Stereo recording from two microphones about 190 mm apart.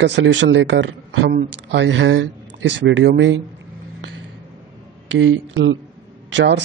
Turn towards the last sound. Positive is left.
turn(degrees=-70)  # may be behind; listen again after turning